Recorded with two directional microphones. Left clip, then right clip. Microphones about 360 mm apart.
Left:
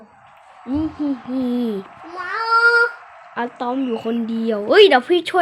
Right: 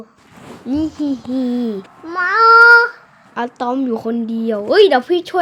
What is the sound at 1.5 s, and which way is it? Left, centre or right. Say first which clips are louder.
Speech: left 1 dB; centre.